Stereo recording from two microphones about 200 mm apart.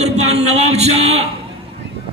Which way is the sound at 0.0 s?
30° right (ahead or behind).